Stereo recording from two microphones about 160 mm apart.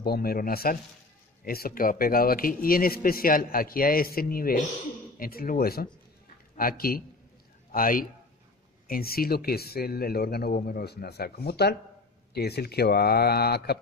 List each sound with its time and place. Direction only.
0.0 s a man's voice: 75° left (ahead or behind)